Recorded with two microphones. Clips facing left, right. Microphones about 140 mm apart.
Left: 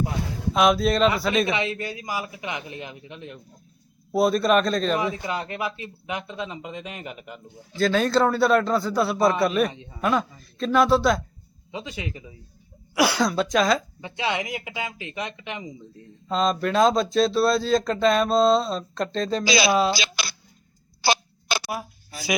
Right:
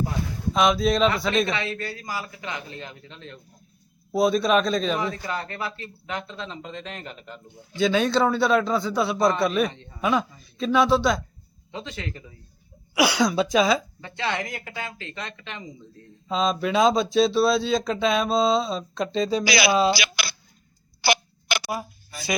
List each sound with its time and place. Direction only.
0.5 s speech: 5° left (ahead or behind)
1.5 s speech: 20° left (ahead or behind)
4.1 s speech: centre (ahead or behind)
4.9 s speech: 15° left (ahead or behind)
7.8 s speech: centre (ahead or behind)
12.9 s speech: centre (ahead or behind)
14.0 s speech: 15° left (ahead or behind)
16.3 s speech: centre (ahead or behind)
19.5 s speech: 25° left (ahead or behind)
19.7 s speech: centre (ahead or behind)
21.0 s tick-tock: 25° left (ahead or behind)